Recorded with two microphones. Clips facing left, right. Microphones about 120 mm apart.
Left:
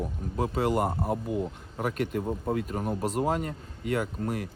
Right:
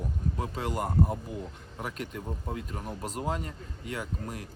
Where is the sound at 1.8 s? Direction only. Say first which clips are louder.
Left 8 dB; 50° left (ahead or behind).